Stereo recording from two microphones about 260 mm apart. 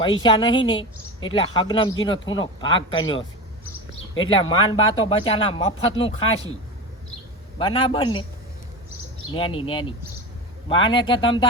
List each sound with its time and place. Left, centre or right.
0.0 s a man's voice: centre
4.4 s speech: centre
7.6 s speech: centre
9.3 s speech: left